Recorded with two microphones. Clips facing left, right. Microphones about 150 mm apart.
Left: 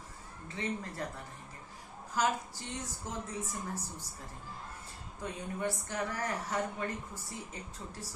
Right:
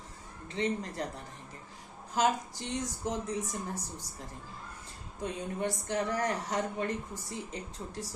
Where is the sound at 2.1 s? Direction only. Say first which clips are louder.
Right 3 dB; 20° right (ahead or behind).